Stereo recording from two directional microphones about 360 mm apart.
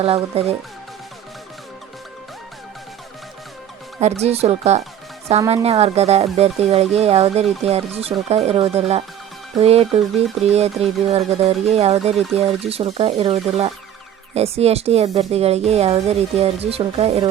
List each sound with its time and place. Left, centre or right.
0.0 s speech: centre
4.0 s speech: centre